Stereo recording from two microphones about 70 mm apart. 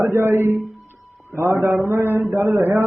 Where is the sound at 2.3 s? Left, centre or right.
Right.